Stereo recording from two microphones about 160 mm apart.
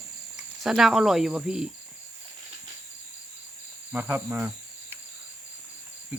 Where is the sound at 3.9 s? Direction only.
10° right (ahead or behind).